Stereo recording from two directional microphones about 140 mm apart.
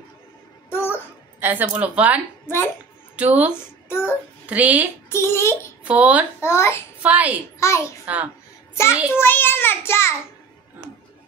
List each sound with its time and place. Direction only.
0.7 s babbling: 15° left (ahead or behind)
1.4 s speech: 15° right (ahead or behind)
2.4 s a child's voice: 15° left (ahead or behind)
3.2 s speech: 10° right (ahead or behind)
3.5 s speech: 15° left (ahead or behind)
4.5 s speech: 10° right (ahead or behind)
5.1 s a sound: 20° left (ahead or behind)
5.9 s speech: 10° right (ahead or behind)
6.4 s a sound: 20° left (ahead or behind)
7.0 s speech: 10° right (ahead or behind)
7.6 s a sound: 20° left (ahead or behind)
8.0 s speech: 10° right (ahead or behind)
9.2 s a child's voice: 15° left (ahead or behind)